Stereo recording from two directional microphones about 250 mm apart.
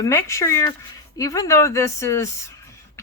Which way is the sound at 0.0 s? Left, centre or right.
Centre.